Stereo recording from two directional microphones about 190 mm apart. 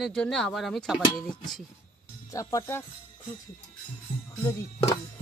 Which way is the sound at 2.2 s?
15° left (ahead or behind).